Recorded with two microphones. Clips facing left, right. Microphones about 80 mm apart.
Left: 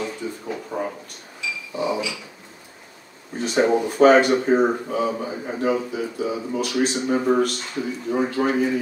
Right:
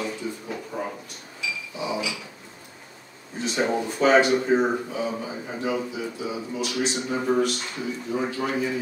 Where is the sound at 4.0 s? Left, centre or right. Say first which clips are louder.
Left 4 dB; left.